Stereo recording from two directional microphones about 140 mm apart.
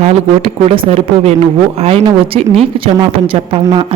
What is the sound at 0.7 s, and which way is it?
A woman's voice, 45° right (ahead or behind).